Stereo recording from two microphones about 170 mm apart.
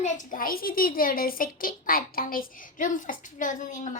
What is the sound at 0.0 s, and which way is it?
A woman's voice, 50° left (ahead or behind).